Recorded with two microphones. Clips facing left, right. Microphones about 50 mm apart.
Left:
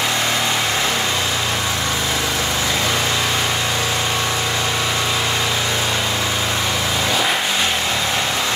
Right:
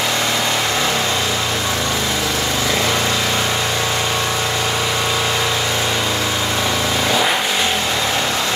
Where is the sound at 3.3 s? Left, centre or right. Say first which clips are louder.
Right 1 dB; centre.